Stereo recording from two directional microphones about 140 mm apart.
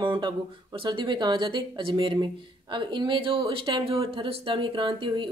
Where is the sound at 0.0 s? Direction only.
35° right (ahead or behind).